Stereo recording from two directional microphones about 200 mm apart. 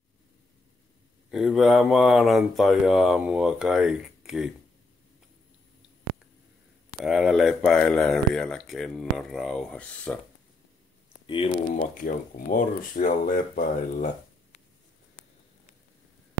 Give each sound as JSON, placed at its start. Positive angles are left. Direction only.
{"t": 1.3, "sound": "speech", "side_deg": 0}
{"t": 7.0, "sound": "speech", "side_deg": 0}
{"t": 11.2, "sound": "speech", "side_deg": 25}
{"t": 11.7, "sound": "speech", "side_deg": 40}